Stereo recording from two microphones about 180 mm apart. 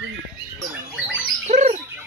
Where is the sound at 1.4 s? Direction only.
40° right (ahead or behind).